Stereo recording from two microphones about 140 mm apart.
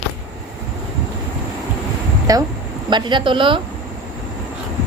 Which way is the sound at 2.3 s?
25° right (ahead or behind).